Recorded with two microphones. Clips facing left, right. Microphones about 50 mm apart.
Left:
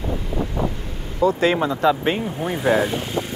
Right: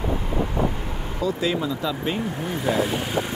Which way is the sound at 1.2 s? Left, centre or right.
Left.